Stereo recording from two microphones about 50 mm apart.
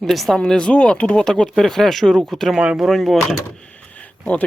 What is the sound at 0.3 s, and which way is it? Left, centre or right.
Speech, centre.